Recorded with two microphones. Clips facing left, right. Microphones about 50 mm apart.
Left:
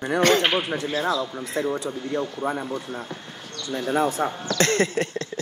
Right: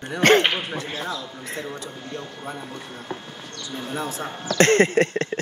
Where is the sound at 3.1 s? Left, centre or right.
Right.